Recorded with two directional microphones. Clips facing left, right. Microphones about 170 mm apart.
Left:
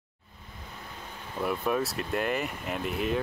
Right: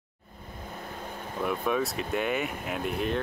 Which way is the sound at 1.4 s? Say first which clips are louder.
Even; centre (ahead or behind).